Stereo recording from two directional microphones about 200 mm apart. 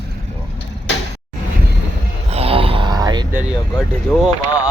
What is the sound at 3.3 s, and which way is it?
Speech, 5° right (ahead or behind).